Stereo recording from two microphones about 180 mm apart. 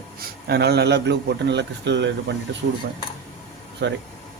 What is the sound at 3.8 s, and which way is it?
Speech, 70° right (ahead or behind).